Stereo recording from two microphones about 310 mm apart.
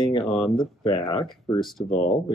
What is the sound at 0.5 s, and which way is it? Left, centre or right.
Speech, centre.